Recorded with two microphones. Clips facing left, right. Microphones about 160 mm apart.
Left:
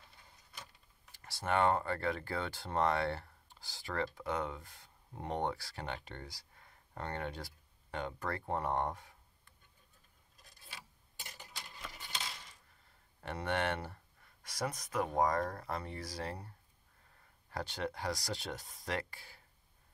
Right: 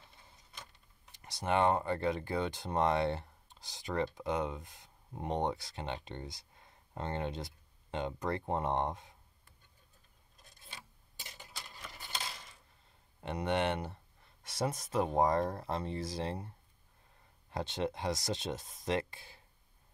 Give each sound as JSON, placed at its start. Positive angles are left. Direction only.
{"t": 1.1, "sound": "speech", "side_deg": -20}
{"t": 13.2, "sound": "speech", "side_deg": -20}